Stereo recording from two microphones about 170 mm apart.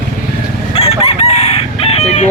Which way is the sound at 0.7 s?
35° left (ahead or behind).